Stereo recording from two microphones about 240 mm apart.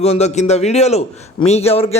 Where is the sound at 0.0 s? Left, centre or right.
Left.